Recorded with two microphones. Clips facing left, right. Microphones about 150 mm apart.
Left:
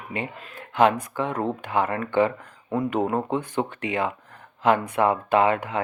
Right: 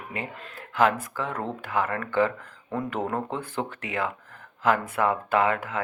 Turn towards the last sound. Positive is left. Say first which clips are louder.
# left 3 dB
turn(degrees=20)  # may be behind; listen again after turning